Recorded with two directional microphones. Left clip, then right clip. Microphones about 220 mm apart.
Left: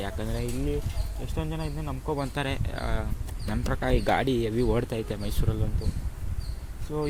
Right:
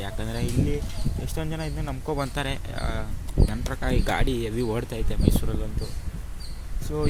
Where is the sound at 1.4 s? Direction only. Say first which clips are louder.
Right 1 dB; 10° right (ahead or behind).